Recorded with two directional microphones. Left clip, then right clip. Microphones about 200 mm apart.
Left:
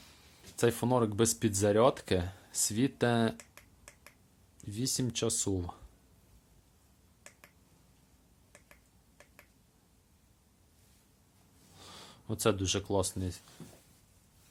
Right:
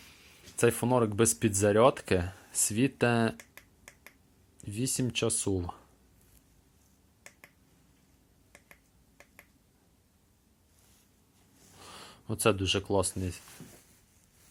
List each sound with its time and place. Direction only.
0.1 s speech: centre (ahead or behind)
4.5 s speech: centre (ahead or behind)
8.5 s finger snapping: 15° right (ahead or behind)
11.8 s speech: centre (ahead or behind)